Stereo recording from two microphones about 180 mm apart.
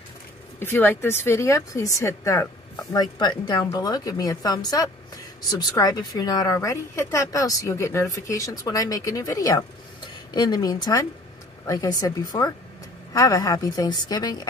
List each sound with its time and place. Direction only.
0.6 s speech: 10° left (ahead or behind)